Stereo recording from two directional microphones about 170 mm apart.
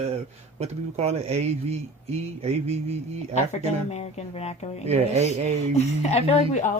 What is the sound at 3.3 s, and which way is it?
Speech, 40° left (ahead or behind).